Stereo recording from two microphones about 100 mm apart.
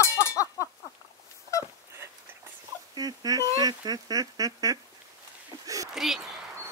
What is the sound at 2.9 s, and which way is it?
Speech, 40° right (ahead or behind).